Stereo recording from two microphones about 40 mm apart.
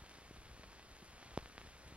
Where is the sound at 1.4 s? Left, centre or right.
Right.